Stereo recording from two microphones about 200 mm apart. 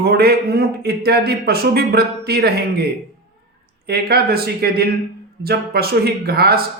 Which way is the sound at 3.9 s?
50° right (ahead or behind).